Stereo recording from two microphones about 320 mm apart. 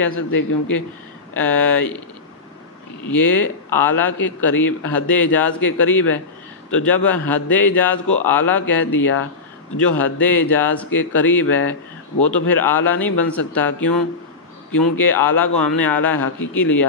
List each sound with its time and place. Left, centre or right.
0.1 s speech: left
1.3 s a man's voice: centre
3.1 s a man's voice: centre